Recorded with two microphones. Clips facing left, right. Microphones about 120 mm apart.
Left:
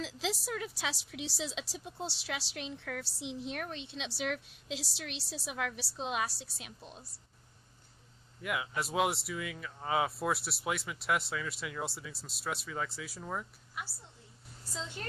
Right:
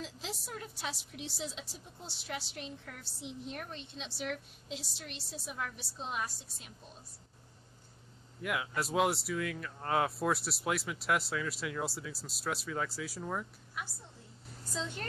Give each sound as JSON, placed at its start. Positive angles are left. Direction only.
{"t": 0.0, "sound": "a woman's voice", "side_deg": 90}
{"t": 8.4, "sound": "speech", "side_deg": 0}